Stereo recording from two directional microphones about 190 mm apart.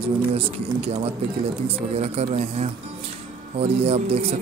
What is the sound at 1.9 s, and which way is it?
Speech, 35° right (ahead or behind).